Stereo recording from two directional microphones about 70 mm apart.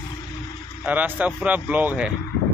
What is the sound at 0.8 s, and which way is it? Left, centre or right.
Speech, right.